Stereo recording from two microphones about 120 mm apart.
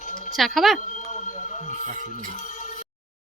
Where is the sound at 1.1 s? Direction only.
90° left.